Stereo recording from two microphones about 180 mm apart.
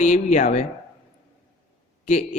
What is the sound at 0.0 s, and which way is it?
Speech, 40° left (ahead or behind).